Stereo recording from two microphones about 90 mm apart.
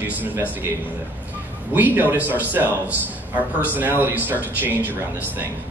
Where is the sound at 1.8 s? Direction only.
20° right (ahead or behind).